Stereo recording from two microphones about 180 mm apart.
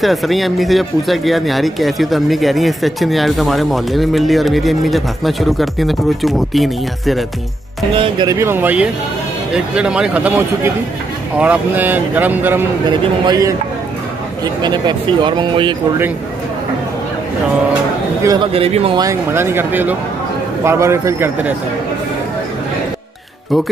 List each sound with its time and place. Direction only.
0.0 s speech: centre (ahead or behind)
7.9 s speech: 30° right (ahead or behind)
8.3 s speech: 15° right (ahead or behind)
12.8 s speech: 25° right (ahead or behind)
18.2 s speech: 20° right (ahead or behind)
18.5 s speech: 35° right (ahead or behind)
18.9 s speech: 15° right (ahead or behind)